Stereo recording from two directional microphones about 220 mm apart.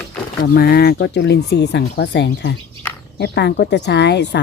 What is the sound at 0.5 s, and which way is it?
Speech, 45° left (ahead or behind).